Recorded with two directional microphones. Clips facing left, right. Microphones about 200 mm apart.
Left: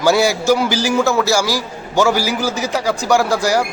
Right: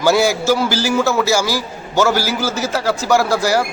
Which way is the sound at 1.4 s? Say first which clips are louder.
Left 1 dB; 10° left (ahead or behind).